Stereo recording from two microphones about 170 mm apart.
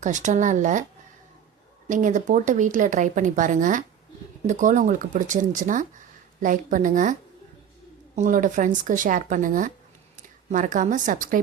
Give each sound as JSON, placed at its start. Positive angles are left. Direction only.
{"t": 0.0, "sound": "speech", "side_deg": -45}
{"t": 1.9, "sound": "a woman's voice", "side_deg": -50}